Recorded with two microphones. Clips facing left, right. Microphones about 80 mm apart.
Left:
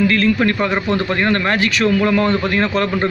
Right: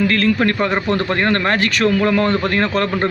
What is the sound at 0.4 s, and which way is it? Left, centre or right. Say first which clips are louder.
A man's voice: even; right.